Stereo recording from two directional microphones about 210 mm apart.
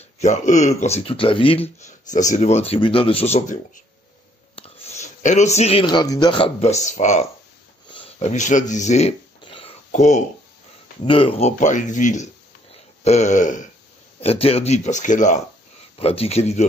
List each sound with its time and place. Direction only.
0.2 s speech: 35° left (ahead or behind)
4.6 s speech: 30° left (ahead or behind)
7.9 s a sound: 30° left (ahead or behind)
9.8 s speech: 35° left (ahead or behind)